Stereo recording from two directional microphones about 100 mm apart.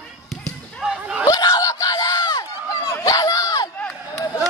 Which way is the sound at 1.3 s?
40° left (ahead or behind).